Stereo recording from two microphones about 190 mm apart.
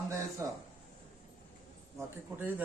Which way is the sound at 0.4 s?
15° right (ahead or behind).